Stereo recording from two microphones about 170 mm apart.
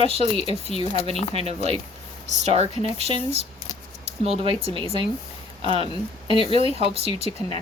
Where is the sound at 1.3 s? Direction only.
35° right (ahead or behind).